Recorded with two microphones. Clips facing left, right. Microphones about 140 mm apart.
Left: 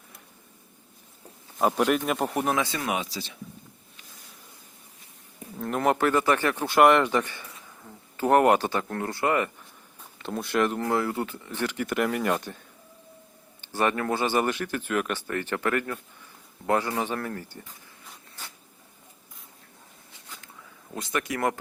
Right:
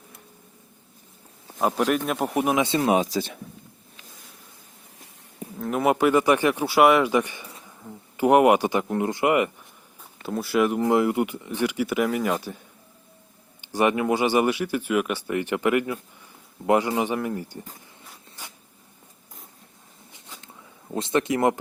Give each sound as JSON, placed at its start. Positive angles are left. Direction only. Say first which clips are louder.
{"t": 1.5, "sound": "speech", "louder": "even", "side_deg": 0}
{"t": 2.6, "sound": "speech", "louder": "right 9 dB", "side_deg": -30}
{"t": 5.5, "sound": "speech", "louder": "right 2 dB", "side_deg": -5}
{"t": 10.2, "sound": "speech", "louder": "right 3 dB", "side_deg": -5}
{"t": 13.6, "sound": "speech", "louder": "right 4 dB", "side_deg": -15}
{"t": 18.4, "sound": "insect", "louder": "right 1 dB", "side_deg": -15}
{"t": 20.9, "sound": "speech", "louder": "right 7 dB", "side_deg": -25}